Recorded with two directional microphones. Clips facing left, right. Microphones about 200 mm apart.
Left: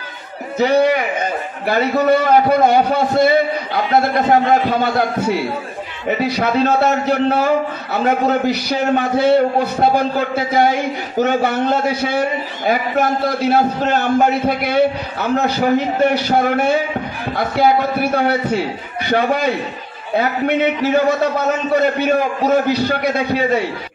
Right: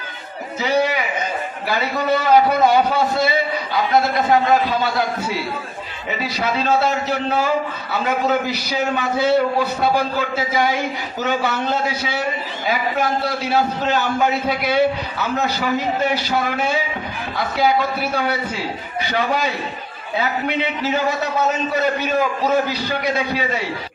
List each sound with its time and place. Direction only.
0.6 s a man's voice: 55° left (ahead or behind)